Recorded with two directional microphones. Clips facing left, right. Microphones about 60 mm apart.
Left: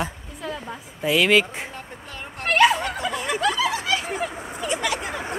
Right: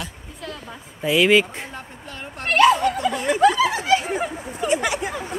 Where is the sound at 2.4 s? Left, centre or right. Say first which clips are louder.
Right 2 dB; centre.